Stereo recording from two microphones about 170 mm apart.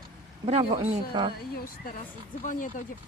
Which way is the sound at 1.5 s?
60° left (ahead or behind).